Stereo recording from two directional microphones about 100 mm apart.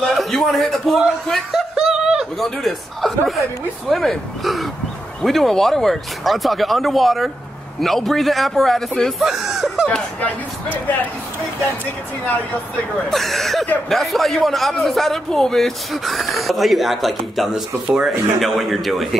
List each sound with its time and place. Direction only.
0.1 s a man's voice: centre (ahead or behind)
9.8 s speech: 15° left (ahead or behind)
13.1 s a man's voice: centre (ahead or behind)